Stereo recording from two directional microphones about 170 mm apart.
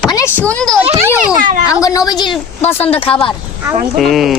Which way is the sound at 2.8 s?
35° left (ahead or behind).